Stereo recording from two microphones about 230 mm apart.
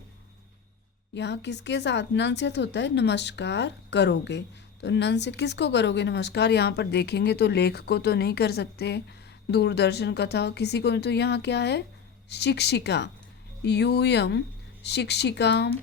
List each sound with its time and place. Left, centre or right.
1.1 s speech: left